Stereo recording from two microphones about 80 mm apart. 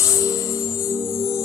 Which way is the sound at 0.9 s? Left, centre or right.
Left.